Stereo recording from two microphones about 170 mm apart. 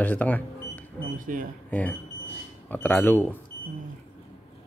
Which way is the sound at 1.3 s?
55° right (ahead or behind).